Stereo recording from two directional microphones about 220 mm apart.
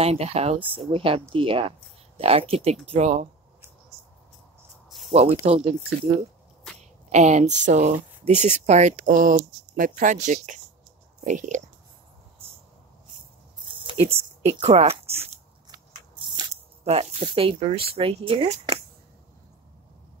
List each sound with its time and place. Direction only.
0.0 s speech: 30° right (ahead or behind)
4.8 s a sound: centre (ahead or behind)
5.1 s speech: 30° right (ahead or behind)
6.8 s speech: 30° right (ahead or behind)
13.7 s a sound: 20° right (ahead or behind)
14.0 s a woman's voice: 25° right (ahead or behind)
16.8 s speech: 30° right (ahead or behind)